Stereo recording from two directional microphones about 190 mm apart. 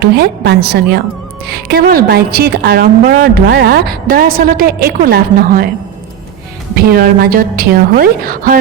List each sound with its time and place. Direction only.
0.0 s a woman's voice: 60° right (ahead or behind)
6.8 s a woman's voice: 55° right (ahead or behind)